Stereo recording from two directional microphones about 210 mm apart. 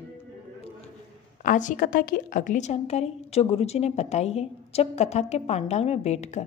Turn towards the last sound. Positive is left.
turn(degrees=30)  # may be behind; listen again after turning